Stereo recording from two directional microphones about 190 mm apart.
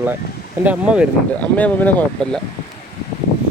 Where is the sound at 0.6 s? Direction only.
5° right (ahead or behind).